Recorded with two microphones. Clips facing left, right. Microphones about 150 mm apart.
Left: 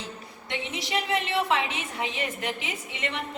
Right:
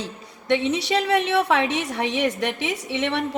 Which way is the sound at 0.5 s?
75° right (ahead or behind).